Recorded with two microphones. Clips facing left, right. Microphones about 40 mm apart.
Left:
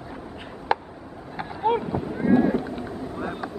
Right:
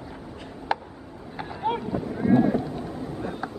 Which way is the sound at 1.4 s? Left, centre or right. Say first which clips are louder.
Left 4 dB; centre.